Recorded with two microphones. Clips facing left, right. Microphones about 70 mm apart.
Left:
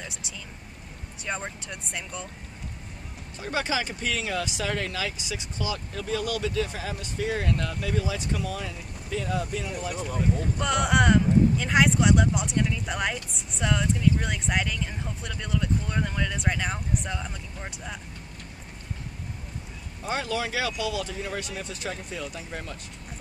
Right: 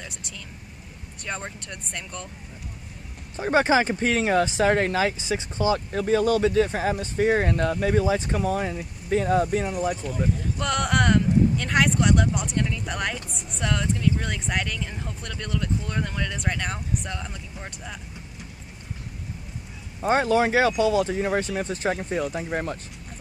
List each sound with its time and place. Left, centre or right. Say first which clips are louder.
0.0 s vehicle: even; centre
1.2 s speech: even; centre
3.3 s speech: right 9 dB; right
10.6 s speech: even; centre
20.0 s speech: right 9 dB; right